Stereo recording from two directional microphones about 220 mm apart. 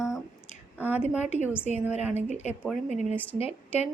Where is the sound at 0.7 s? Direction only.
5° right (ahead or behind).